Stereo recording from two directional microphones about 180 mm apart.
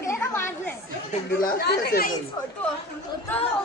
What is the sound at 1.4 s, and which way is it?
Speech, 65° left (ahead or behind).